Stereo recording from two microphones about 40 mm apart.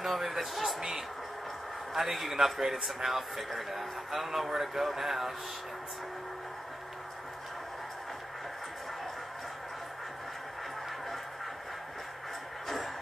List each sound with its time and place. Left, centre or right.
0.0 s music: centre
0.7 s a sound: centre
2.0 s a man's voice: centre
12.6 s music: centre